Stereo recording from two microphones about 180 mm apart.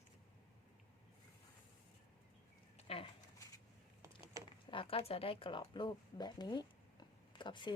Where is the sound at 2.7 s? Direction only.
35° left (ahead or behind).